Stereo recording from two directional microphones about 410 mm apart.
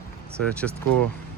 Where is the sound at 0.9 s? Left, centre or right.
Right.